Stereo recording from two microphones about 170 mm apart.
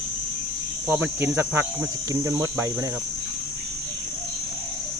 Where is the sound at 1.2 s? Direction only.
15° right (ahead or behind).